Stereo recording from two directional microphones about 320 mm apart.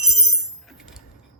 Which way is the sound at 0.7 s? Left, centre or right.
Centre.